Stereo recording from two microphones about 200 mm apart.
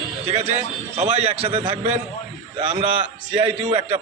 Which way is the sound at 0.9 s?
30° right (ahead or behind).